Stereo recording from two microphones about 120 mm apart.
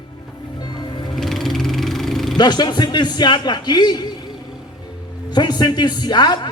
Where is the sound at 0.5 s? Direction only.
35° left (ahead or behind).